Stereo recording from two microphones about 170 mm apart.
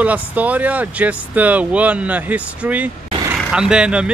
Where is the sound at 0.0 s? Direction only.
10° right (ahead or behind).